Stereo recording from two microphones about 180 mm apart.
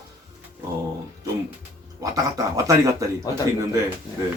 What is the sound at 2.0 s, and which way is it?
Speech, 20° right (ahead or behind).